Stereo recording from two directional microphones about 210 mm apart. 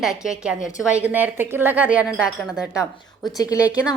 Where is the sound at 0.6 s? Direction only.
35° left (ahead or behind).